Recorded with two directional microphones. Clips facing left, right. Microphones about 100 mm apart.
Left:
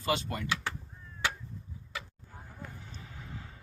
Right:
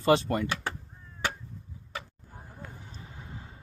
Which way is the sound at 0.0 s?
45° right (ahead or behind).